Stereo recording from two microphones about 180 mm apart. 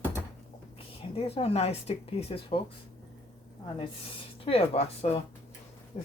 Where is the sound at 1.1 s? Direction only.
35° left (ahead or behind).